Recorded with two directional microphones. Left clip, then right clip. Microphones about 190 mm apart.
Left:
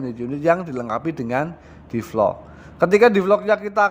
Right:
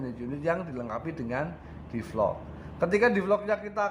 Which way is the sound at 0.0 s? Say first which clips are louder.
Left 10 dB; 35° left (ahead or behind).